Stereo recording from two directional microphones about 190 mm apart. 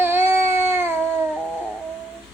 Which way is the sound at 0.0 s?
10° right (ahead or behind).